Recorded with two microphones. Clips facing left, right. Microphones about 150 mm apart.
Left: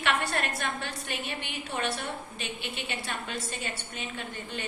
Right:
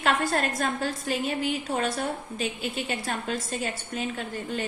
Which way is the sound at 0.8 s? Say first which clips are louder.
Right 8 dB; 60° left (ahead or behind).